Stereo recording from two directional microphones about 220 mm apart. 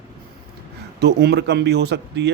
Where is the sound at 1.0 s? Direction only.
50° right (ahead or behind).